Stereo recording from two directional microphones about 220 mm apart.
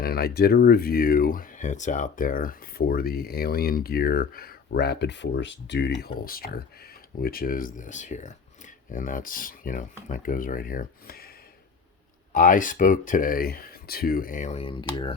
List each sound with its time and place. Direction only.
0.0 s speech: 45° left (ahead or behind)
6.2 s speech: 40° left (ahead or behind)
12.3 s speech: 35° left (ahead or behind)